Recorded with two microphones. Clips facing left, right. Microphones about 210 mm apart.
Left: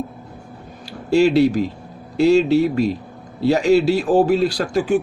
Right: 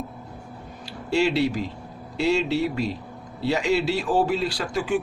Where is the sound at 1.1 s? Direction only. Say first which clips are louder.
Left 8 dB; 45° left (ahead or behind).